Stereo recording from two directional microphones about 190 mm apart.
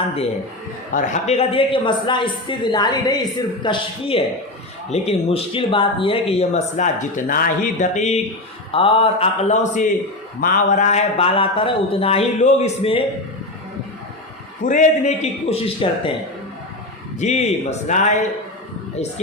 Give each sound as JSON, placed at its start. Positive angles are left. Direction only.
{"t": 0.9, "sound": "a man's voice", "side_deg": 35}
{"t": 14.6, "sound": "speech", "side_deg": 40}
{"t": 17.2, "sound": "speech", "side_deg": 35}